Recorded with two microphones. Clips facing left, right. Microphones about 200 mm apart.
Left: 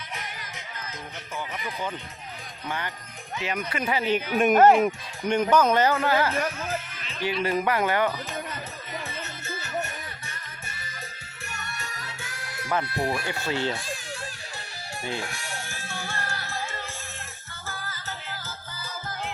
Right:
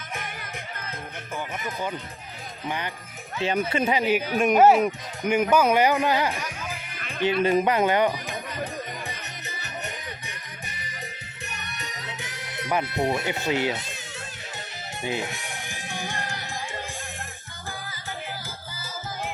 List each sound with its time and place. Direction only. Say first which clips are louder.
0.1 s music: right 5 dB; 50° right (ahead or behind)
2.6 s a man's voice: right 2 dB; 15° right (ahead or behind)
3.4 s speech: right 6 dB; 30° right (ahead or behind)
4.4 s a man's voice: even; centre (ahead or behind); by 6.4 s 15° right (ahead or behind)
6.7 s music: left 3 dB; 15° right (ahead or behind)
7.4 s speech: right 3 dB; 20° right (ahead or behind)
9.0 s music: left 2 dB; 15° right (ahead or behind)
15.0 s music: right 4 dB; 20° right (ahead or behind)